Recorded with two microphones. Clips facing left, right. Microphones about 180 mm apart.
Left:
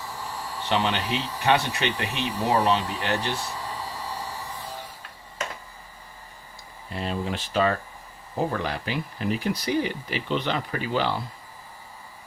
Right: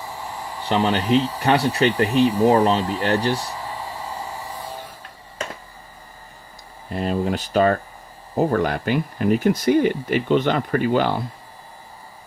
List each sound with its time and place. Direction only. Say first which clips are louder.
0.7 s speech: right 7 dB; 35° right (ahead or behind)
6.9 s speech: right 7 dB; 45° right (ahead or behind)